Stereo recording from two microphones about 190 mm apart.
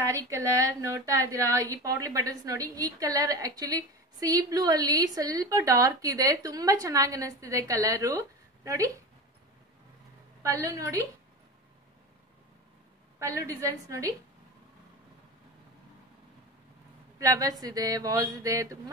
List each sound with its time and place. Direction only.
0.0 s a woman's voice: 15° right (ahead or behind)
10.4 s a woman's voice: 15° right (ahead or behind)
13.2 s a woman's voice: 15° right (ahead or behind)
17.2 s speech: 20° right (ahead or behind)